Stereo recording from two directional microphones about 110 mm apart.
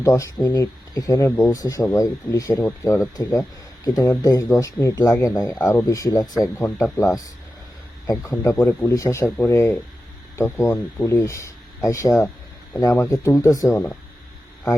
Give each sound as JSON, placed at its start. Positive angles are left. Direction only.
{"t": 0.0, "sound": "speech", "side_deg": 30}